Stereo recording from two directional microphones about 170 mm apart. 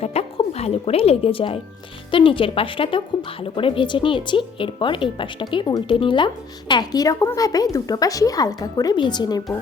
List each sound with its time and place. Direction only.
0.0 s music: 40° left (ahead or behind)
2.0 s speech: 30° left (ahead or behind)